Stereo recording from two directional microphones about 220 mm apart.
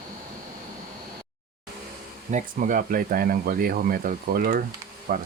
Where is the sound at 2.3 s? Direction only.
40° right (ahead or behind).